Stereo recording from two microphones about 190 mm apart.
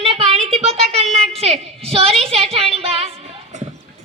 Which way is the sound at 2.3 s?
30° right (ahead or behind).